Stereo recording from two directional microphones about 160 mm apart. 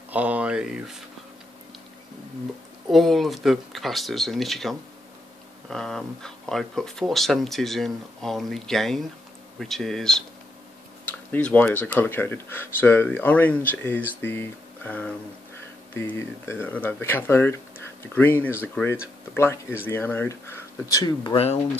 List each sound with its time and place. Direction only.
0.1 s speech: 10° right (ahead or behind)
2.9 s speech: centre (ahead or behind); by 21.4 s 25° left (ahead or behind)